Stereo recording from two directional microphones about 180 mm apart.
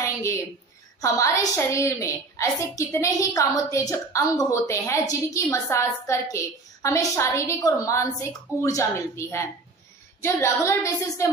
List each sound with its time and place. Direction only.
1.0 s a woman's voice: 15° left (ahead or behind)